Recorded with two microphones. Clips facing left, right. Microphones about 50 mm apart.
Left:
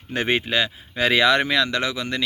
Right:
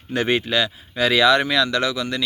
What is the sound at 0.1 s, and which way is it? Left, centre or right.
Speech, left.